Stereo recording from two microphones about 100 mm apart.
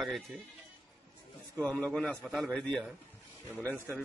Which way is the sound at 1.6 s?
15° left (ahead or behind).